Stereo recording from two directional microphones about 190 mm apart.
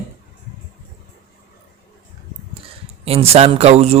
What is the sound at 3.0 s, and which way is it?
Speech, 30° right (ahead or behind).